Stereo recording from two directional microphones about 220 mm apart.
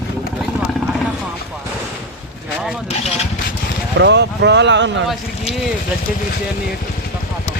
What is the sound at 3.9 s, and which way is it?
Speech, 50° right (ahead or behind).